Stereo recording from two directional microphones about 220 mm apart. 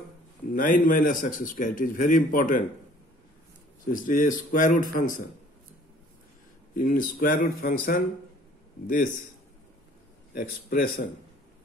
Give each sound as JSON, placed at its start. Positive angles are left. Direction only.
{"t": 0.5, "sound": "a man's voice", "side_deg": 40}
{"t": 3.8, "sound": "a man's voice", "side_deg": 40}
{"t": 6.7, "sound": "a man's voice", "side_deg": 40}
{"t": 10.3, "sound": "speech", "side_deg": 40}